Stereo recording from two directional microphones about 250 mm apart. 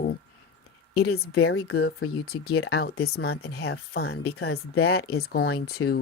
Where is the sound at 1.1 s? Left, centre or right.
Left.